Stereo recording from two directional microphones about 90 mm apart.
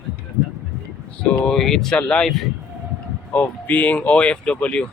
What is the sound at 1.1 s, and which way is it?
Speech, 10° left (ahead or behind).